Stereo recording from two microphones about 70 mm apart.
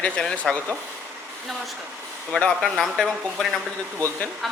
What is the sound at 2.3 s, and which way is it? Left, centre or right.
A woman's voice, centre.